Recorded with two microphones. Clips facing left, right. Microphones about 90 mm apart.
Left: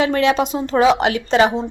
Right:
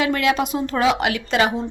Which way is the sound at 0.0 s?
30° left (ahead or behind).